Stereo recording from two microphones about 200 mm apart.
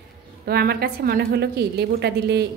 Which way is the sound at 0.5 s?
50° right (ahead or behind).